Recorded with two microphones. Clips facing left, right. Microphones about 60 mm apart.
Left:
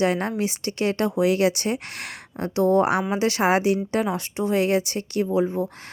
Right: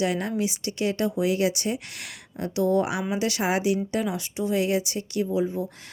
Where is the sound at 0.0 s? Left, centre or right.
Left.